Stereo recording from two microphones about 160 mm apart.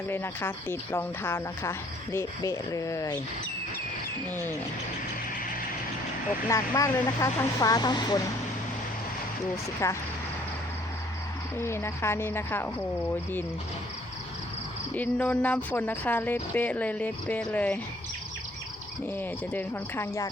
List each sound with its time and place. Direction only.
0.1 s speech: 15° left (ahead or behind)
6.5 s speech: 20° left (ahead or behind)
9.8 s speech: 20° left (ahead or behind)
11.5 s speech: 15° left (ahead or behind)
14.9 s speech: 10° left (ahead or behind)
19.0 s speech: 10° left (ahead or behind)